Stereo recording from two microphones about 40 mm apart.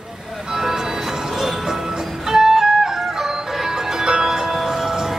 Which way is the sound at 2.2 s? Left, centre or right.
Centre.